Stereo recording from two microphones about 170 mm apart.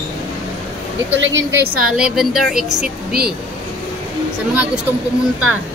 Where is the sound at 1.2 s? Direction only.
65° right (ahead or behind).